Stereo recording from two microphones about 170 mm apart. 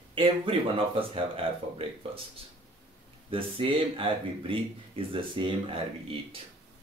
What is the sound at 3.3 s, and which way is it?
Speech, 30° right (ahead or behind).